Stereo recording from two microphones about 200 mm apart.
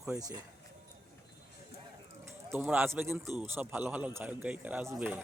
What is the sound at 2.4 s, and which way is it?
Speech, 10° right (ahead or behind).